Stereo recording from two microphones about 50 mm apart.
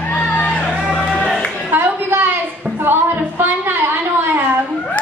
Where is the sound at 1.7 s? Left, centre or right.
Right.